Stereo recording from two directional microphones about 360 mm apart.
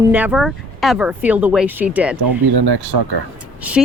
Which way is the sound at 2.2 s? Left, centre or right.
Right.